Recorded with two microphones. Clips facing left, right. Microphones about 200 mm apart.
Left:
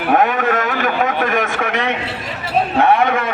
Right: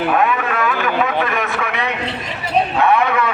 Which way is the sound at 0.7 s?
45° left (ahead or behind).